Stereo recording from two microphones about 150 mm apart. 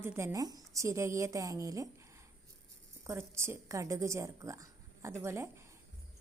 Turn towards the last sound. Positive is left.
turn(degrees=-15)  # may be behind; listen again after turning